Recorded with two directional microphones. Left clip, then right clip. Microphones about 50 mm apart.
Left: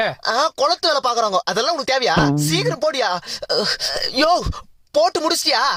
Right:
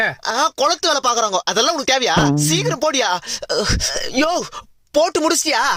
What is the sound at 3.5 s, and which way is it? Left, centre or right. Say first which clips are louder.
Speech: even; centre.